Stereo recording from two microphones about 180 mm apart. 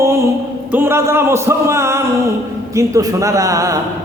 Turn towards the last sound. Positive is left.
turn(degrees=-15)  # may be behind; listen again after turning